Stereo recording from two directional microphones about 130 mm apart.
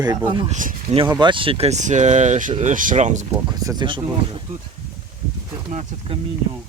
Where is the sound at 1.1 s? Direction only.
40° right (ahead or behind); by 2.5 s 75° right (ahead or behind).